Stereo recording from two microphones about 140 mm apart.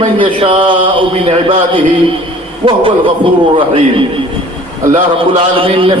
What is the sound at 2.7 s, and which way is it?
Speech, 40° right (ahead or behind).